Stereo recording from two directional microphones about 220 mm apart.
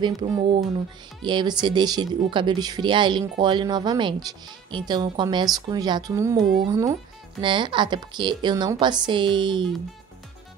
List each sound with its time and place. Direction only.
0.0 s speech: 20° right (ahead or behind)